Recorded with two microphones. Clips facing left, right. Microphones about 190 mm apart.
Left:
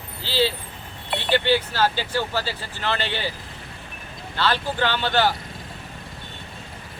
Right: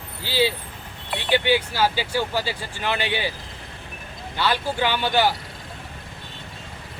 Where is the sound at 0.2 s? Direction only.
15° right (ahead or behind).